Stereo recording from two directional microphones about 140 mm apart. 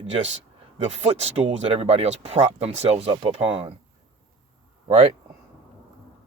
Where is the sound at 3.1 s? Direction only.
40° right (ahead or behind).